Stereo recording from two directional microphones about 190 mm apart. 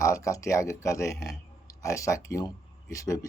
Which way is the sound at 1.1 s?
Centre (ahead or behind).